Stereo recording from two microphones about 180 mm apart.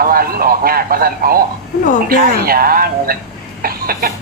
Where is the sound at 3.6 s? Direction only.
55° right (ahead or behind).